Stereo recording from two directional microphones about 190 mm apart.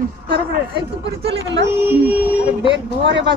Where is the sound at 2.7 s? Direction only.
70° right (ahead or behind).